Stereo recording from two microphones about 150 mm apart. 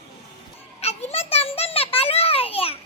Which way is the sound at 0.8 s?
45° left (ahead or behind).